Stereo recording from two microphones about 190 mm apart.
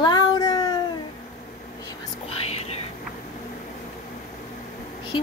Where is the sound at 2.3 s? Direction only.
30° left (ahead or behind).